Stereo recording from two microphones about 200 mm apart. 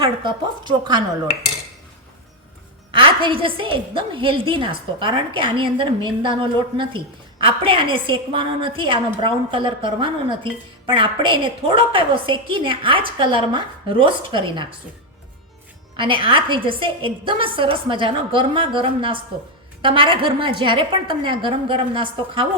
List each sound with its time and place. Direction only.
0.0 s a woman's voice: 25° right (ahead or behind)
2.9 s a woman's voice: 25° right (ahead or behind)
16.0 s a woman's voice: 25° right (ahead or behind)